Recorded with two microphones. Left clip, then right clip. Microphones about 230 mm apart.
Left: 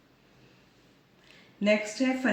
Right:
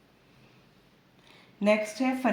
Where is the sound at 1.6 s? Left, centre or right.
Right.